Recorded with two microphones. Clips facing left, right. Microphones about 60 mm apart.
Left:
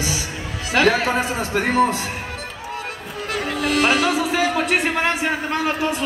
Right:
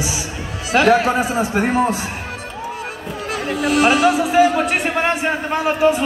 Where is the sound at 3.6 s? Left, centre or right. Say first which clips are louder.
Right 4 dB; centre.